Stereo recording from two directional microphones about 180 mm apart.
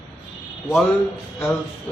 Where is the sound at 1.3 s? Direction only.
10° left (ahead or behind).